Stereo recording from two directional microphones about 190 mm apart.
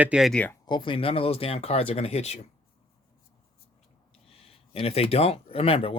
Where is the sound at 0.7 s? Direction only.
25° left (ahead or behind).